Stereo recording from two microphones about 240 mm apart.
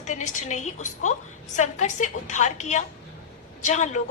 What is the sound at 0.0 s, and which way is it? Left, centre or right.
A woman's voice, left.